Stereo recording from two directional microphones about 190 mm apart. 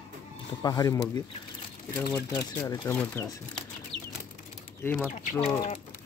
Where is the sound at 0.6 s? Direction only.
20° left (ahead or behind).